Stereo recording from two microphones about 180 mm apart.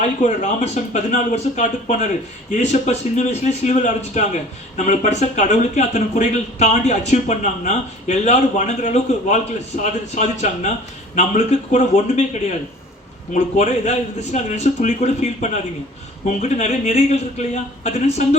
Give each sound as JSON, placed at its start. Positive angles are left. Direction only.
{"t": 0.7, "sound": "speech", "side_deg": 40}